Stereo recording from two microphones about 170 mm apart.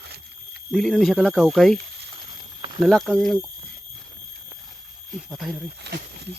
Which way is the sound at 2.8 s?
Centre (ahead or behind).